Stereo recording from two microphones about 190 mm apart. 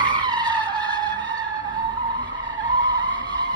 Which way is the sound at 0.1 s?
25° right (ahead or behind).